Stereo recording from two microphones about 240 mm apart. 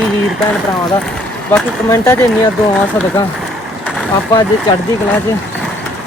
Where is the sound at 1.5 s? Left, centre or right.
Centre.